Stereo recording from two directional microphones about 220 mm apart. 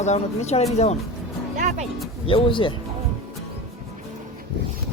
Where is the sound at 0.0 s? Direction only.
30° left (ahead or behind).